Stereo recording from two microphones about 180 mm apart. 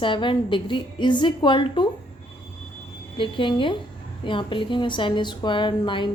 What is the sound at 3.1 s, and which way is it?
A woman's voice, 30° left (ahead or behind).